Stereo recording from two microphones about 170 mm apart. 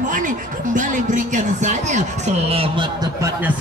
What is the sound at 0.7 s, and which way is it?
Speech, 45° right (ahead or behind).